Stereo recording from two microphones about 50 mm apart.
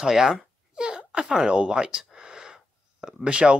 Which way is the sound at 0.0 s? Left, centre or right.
Centre.